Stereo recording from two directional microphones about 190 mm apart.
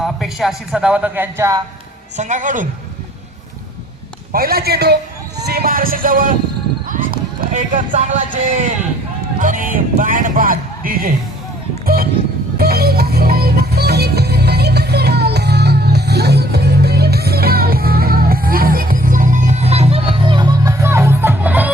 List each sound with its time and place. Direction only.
0.0 s a man's voice: centre (ahead or behind)
2.1 s a man's voice: 40° right (ahead or behind)
4.3 s a man's voice: 50° right (ahead or behind)
6.8 s clip-clop: 45° right (ahead or behind)
9.4 s a man's voice: 45° right (ahead or behind)
12.5 s music: 55° right (ahead or behind); by 21.7 s 10° right (ahead or behind)